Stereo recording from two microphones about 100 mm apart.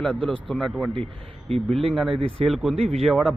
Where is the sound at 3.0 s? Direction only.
5° left (ahead or behind).